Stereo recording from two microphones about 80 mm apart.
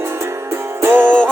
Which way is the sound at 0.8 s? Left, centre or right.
Right.